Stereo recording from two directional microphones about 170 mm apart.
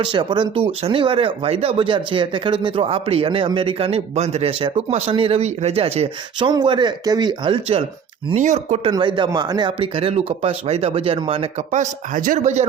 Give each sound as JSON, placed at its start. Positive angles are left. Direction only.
{"t": 0.0, "sound": "speech", "side_deg": -25}
{"t": 8.4, "sound": "speech", "side_deg": -45}
{"t": 8.9, "sound": "speech", "side_deg": -30}